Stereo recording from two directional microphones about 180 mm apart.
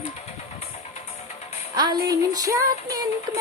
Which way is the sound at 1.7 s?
25° right (ahead or behind).